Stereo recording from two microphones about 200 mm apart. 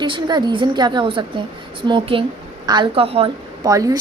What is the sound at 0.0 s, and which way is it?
Speech, 20° right (ahead or behind).